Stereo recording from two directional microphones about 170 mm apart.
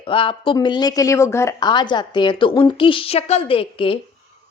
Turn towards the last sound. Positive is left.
turn(degrees=30)  # may be behind; listen again after turning